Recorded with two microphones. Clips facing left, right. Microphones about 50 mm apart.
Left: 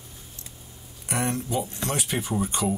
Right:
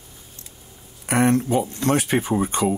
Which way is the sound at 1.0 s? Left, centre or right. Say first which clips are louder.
Right 9 dB; right.